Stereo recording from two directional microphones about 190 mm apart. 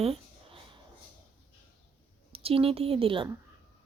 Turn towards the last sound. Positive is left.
turn(degrees=-30)  # may be behind; listen again after turning